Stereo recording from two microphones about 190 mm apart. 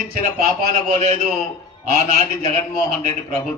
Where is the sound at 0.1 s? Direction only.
45° right (ahead or behind).